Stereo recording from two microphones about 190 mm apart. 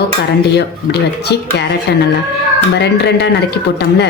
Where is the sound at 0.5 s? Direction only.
60° left (ahead or behind).